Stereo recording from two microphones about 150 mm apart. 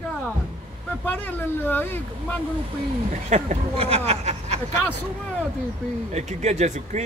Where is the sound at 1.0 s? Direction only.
10° left (ahead or behind).